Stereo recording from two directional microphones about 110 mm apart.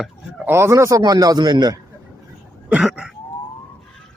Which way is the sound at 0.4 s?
25° right (ahead or behind).